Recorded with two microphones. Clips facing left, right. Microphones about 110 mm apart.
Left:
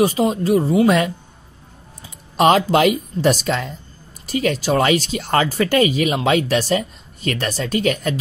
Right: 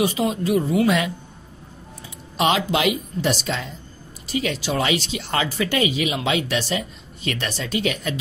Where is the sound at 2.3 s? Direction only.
45° left (ahead or behind).